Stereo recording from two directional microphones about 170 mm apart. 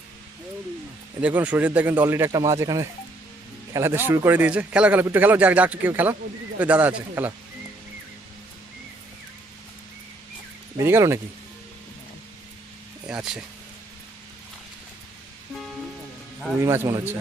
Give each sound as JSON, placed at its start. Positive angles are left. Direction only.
{"t": 1.2, "sound": "speech", "side_deg": -10}
{"t": 10.8, "sound": "speech", "side_deg": -15}
{"t": 13.1, "sound": "speech", "side_deg": -5}
{"t": 16.6, "sound": "speech", "side_deg": -15}